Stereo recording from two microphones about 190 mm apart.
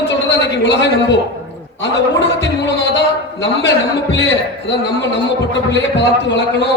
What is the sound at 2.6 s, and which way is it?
Speech, 70° left (ahead or behind).